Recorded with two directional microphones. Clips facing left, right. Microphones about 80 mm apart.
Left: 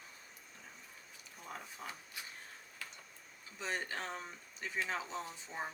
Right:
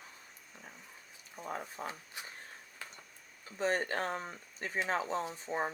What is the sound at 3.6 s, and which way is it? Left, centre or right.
Speech, right.